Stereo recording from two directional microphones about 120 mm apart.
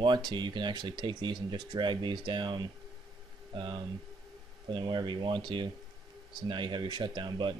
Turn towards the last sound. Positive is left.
turn(degrees=-40)  # may be behind; listen again after turning